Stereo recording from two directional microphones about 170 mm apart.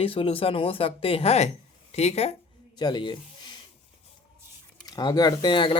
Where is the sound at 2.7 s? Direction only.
25° left (ahead or behind).